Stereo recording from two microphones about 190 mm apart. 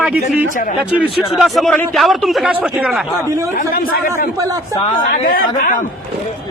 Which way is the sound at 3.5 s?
50° left (ahead or behind).